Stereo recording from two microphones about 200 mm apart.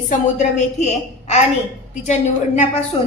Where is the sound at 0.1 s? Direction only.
35° left (ahead or behind).